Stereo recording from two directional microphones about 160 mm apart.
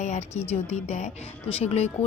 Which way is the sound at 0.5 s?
40° left (ahead or behind).